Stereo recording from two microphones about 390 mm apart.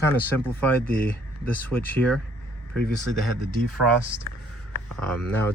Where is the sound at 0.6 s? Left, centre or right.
Centre.